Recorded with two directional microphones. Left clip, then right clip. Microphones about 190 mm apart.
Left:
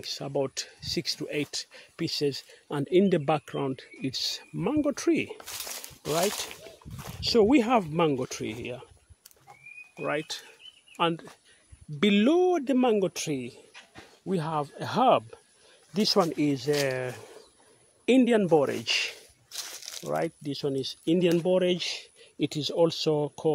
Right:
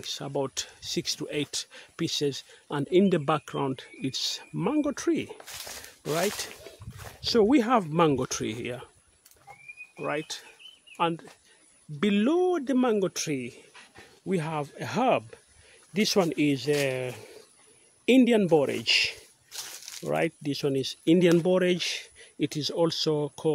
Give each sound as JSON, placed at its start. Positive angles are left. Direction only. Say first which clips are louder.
{"t": 0.0, "sound": "speech", "louder": "left 1 dB", "side_deg": -5}
{"t": 4.8, "sound": "speech", "louder": "left 2 dB", "side_deg": 5}
{"t": 5.4, "sound": "speech", "louder": "left 2 dB", "side_deg": 55}
{"t": 6.2, "sound": "a sound", "louder": "left 1 dB", "side_deg": 55}
{"t": 7.2, "sound": "speech", "louder": "left 1 dB", "side_deg": 0}
{"t": 7.9, "sound": "speech", "louder": "right 2 dB", "side_deg": -20}
{"t": 10.0, "sound": "speech", "louder": "left 1 dB", "side_deg": 5}
{"t": 19.5, "sound": "a sound", "louder": "left 1 dB", "side_deg": 30}
{"t": 20.0, "sound": "speech", "louder": "right 2 dB", "side_deg": -30}
{"t": 22.4, "sound": "speech", "louder": "left 2 dB", "side_deg": -5}